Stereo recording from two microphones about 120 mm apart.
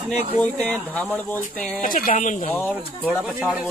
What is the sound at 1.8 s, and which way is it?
Speech, 90° left.